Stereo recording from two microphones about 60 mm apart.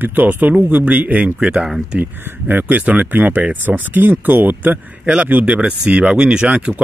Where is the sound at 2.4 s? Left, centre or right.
Right.